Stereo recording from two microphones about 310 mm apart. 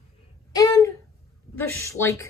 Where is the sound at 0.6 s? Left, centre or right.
Centre.